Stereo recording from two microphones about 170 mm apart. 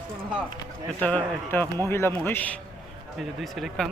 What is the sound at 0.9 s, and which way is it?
A man's voice, 10° left (ahead or behind).